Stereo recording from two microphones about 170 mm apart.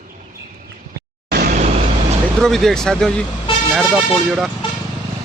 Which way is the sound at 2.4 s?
Centre (ahead or behind).